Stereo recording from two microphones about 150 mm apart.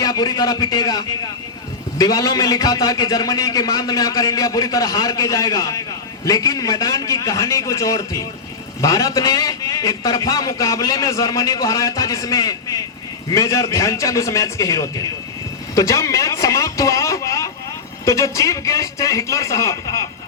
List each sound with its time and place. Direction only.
0.0 s a man's voice: 25° left (ahead or behind)